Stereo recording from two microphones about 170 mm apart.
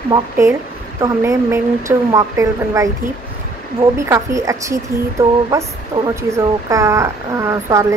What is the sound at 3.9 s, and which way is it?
Speech, 15° right (ahead or behind).